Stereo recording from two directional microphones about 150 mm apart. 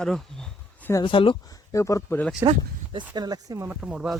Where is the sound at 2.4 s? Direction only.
35° right (ahead or behind).